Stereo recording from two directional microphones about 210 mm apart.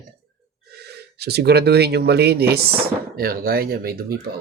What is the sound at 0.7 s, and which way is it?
Speech, 50° right (ahead or behind).